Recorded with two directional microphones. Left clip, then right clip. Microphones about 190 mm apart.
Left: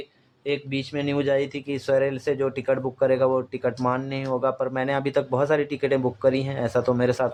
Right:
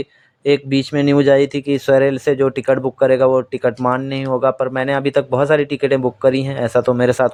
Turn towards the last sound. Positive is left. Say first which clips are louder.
# right 8 dB
turn(degrees=-30)  # may be behind; listen again after turning